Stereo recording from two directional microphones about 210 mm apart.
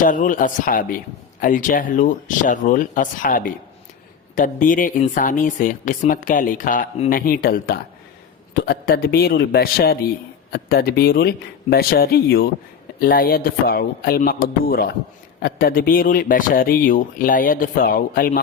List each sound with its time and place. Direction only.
0.0 s a man's voice: 40° left (ahead or behind)